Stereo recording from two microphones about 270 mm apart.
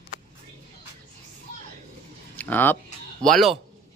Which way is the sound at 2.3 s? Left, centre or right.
Centre.